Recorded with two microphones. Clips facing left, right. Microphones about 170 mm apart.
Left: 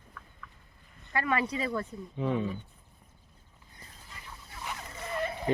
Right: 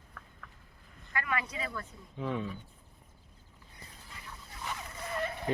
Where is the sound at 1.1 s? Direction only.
30° left (ahead or behind).